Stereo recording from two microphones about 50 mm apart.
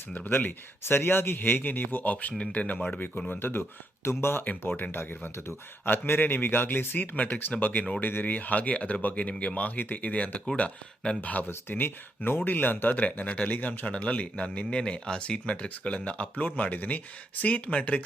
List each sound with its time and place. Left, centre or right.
0.3 s speech: left
3.4 s speech: left
4.0 s speech: left
4.8 s speech: left